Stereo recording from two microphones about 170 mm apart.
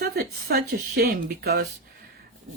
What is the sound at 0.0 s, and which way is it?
Speech, 65° right (ahead or behind).